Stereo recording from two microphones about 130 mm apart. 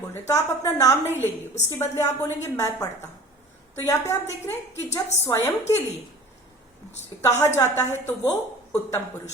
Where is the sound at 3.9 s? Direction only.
20° left (ahead or behind).